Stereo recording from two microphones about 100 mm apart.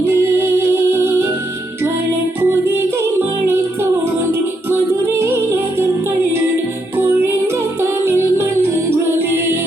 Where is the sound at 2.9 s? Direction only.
25° right (ahead or behind).